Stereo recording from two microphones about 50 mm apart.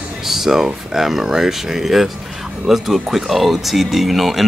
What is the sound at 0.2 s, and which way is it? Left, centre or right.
Speech, centre.